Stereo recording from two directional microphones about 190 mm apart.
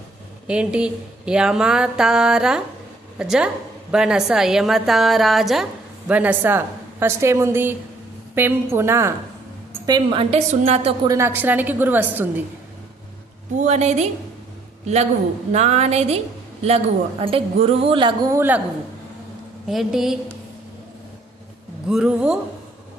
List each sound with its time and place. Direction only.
0.4 s a woman's voice: 5° right (ahead or behind)
9.8 s speech: 25° right (ahead or behind)
11.1 s a woman's voice: 15° right (ahead or behind)
13.6 s a woman's voice: 35° right (ahead or behind)
15.5 s a woman's voice: 35° right (ahead or behind); by 18.6 s 10° right (ahead or behind)
19.6 s speech: centre (ahead or behind)
21.8 s speech: 5° right (ahead or behind)